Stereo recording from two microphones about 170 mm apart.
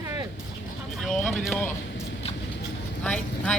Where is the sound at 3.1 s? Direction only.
5° left (ahead or behind).